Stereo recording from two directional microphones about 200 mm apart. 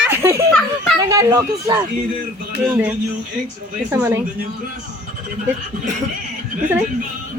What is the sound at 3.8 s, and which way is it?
Speech, 10° right (ahead or behind).